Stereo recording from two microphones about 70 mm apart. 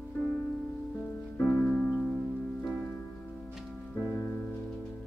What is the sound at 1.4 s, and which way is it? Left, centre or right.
Music, left.